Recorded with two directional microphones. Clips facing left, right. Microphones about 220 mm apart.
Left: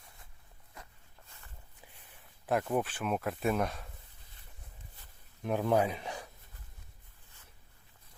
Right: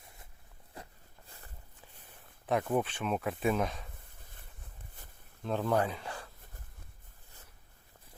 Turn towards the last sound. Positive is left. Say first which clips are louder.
# left 2 dB
turn(degrees=20)  # may be behind; listen again after turning